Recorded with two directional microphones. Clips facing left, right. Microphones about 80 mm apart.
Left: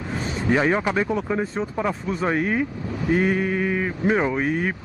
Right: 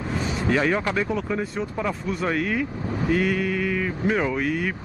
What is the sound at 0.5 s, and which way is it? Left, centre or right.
Speech, centre.